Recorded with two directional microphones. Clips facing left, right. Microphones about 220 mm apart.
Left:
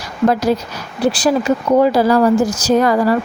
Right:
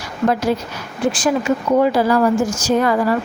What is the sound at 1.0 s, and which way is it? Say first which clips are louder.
Speech: left 3 dB; 35° left (ahead or behind).